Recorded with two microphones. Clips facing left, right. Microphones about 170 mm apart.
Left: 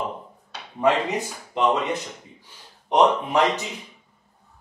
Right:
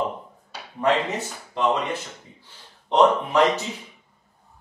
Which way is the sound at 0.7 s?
10° left (ahead or behind).